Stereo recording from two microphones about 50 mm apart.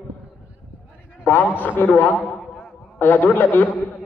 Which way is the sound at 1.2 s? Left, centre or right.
Left.